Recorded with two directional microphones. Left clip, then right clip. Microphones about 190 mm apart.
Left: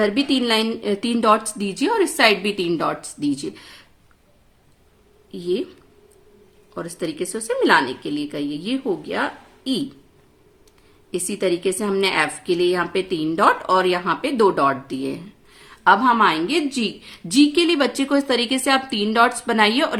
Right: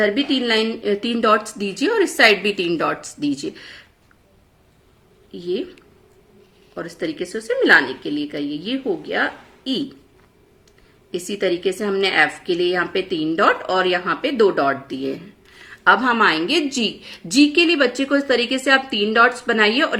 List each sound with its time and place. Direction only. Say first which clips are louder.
0.0 s a woman's voice: right 1 dB; 55° left (ahead or behind)
5.3 s a woman's voice: left 1 dB; 50° left (ahead or behind)
7.0 s a woman's voice: right 1 dB; 50° left (ahead or behind)
11.1 s a woman's voice: right 1 dB; 50° left (ahead or behind)